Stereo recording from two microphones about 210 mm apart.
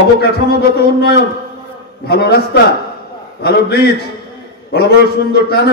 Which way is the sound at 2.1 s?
50° left (ahead or behind).